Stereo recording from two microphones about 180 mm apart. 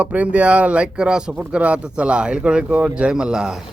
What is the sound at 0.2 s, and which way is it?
Speech, 5° right (ahead or behind).